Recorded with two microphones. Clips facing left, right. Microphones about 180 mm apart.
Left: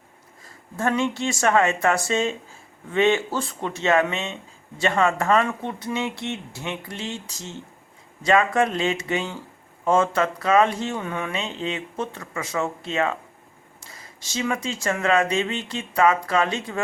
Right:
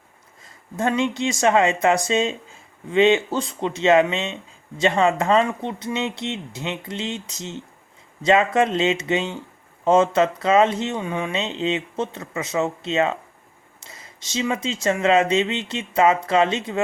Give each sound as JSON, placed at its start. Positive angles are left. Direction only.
{"t": 0.8, "sound": "speech", "side_deg": -20}